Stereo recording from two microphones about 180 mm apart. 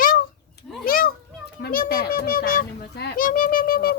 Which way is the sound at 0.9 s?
50° left (ahead or behind).